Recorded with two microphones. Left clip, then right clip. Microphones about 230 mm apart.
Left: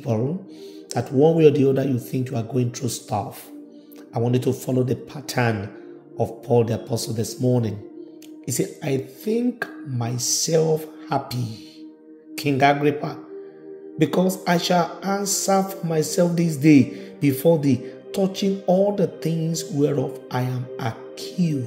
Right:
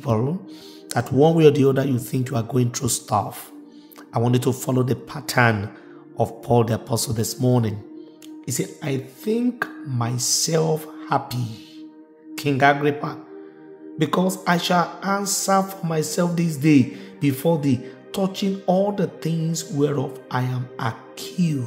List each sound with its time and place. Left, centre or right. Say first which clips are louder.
0.9 s speech: even; centre
6.1 s music: even; centre